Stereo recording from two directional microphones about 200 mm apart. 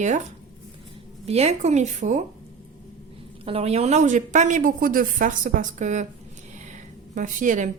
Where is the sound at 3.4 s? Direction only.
30° right (ahead or behind).